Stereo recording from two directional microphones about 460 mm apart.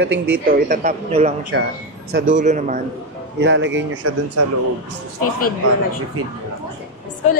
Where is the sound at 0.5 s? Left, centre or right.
Centre.